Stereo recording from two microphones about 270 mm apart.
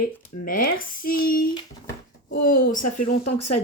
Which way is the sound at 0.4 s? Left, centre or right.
Left.